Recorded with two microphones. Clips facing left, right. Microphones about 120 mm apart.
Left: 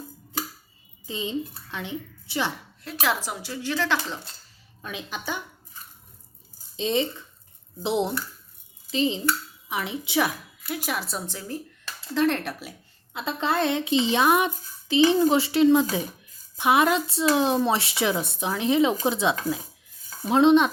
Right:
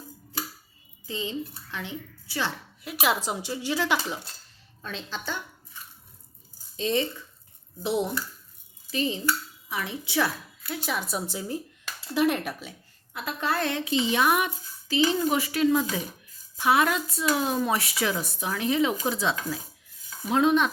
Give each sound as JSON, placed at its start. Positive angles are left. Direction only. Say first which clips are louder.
{"t": 1.0, "sound": "a woman's voice", "louder": "left 2 dB", "side_deg": 20}
{"t": 2.8, "sound": "speech", "louder": "right 1 dB", "side_deg": -15}
{"t": 4.8, "sound": "a woman's voice", "louder": "left 1 dB", "side_deg": 10}
{"t": 6.7, "sound": "a woman's voice", "louder": "left 1 dB", "side_deg": 20}
{"t": 11.3, "sound": "speech", "louder": "right 2 dB", "side_deg": -15}
{"t": 13.1, "sound": "a child's voice", "louder": "left 3 dB", "side_deg": 25}